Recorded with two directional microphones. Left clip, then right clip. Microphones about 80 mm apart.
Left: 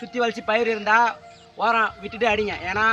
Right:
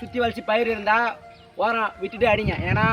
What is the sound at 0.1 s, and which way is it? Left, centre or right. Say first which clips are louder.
A man's voice: even; left.